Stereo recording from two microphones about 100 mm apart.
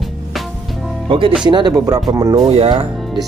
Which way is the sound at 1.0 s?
60° right (ahead or behind).